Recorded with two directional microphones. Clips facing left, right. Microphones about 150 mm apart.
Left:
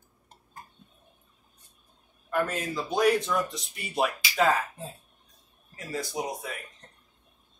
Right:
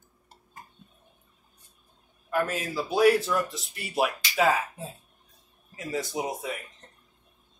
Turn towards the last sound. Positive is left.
turn(degrees=-20)  # may be behind; listen again after turning